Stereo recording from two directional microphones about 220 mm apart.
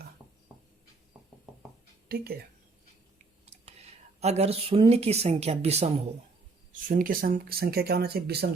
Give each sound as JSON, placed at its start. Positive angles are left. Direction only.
{"t": 2.0, "sound": "speech", "side_deg": -45}
{"t": 3.4, "sound": "speech", "side_deg": -30}
{"t": 6.8, "sound": "speech", "side_deg": -40}